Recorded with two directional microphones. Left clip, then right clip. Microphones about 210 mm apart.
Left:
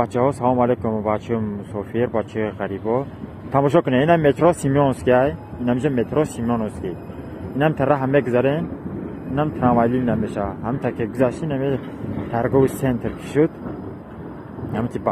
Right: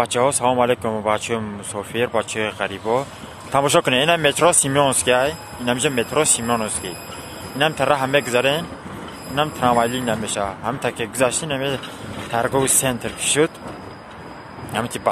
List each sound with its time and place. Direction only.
0.0 s speech: 30° right (ahead or behind)